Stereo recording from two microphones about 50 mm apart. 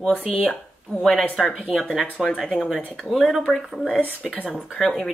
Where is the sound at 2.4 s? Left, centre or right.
Centre.